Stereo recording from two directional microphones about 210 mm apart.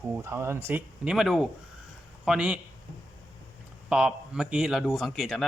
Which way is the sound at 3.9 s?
5° right (ahead or behind).